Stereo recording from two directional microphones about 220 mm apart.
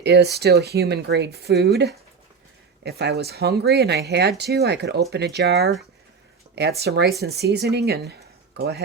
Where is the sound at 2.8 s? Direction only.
50° right (ahead or behind).